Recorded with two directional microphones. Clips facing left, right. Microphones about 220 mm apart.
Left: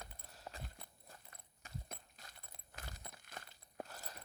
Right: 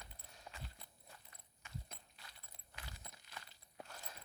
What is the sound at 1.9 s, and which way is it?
Clip-clop, 45° left (ahead or behind).